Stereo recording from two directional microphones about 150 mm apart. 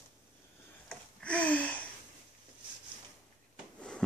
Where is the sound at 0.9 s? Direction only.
10° left (ahead or behind).